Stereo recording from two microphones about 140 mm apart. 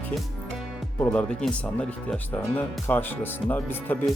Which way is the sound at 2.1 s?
10° left (ahead or behind).